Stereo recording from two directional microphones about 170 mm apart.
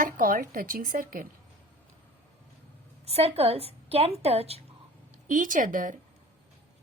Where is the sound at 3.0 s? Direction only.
35° right (ahead or behind).